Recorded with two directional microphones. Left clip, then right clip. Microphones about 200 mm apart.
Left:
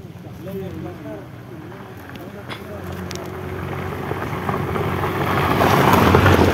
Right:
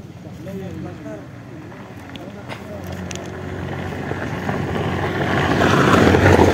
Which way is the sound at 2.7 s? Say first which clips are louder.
Even; 55° left (ahead or behind).